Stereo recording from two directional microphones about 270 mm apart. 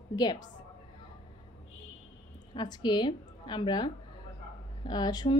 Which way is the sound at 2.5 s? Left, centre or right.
Centre.